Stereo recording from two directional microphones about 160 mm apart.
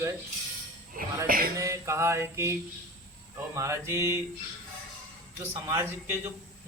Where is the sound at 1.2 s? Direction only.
65° right (ahead or behind).